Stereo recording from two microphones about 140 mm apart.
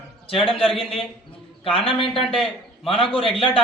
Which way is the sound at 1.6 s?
40° left (ahead or behind).